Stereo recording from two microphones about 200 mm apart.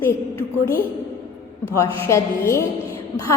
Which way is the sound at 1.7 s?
15° left (ahead or behind).